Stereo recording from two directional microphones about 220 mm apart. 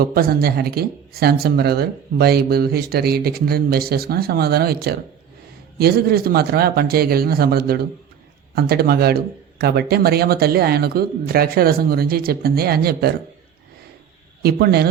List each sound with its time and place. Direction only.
0.0 s speech: 45° right (ahead or behind)
14.4 s speech: 45° right (ahead or behind)